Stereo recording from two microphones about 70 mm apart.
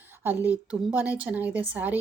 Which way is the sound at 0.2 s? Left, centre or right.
Right.